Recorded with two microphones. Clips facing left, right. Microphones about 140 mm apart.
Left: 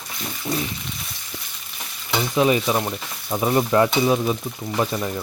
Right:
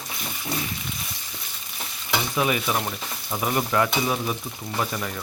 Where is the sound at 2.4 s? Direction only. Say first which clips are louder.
Left 6 dB; 25° left (ahead or behind).